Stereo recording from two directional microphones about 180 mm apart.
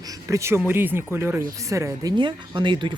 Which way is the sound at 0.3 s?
15° right (ahead or behind).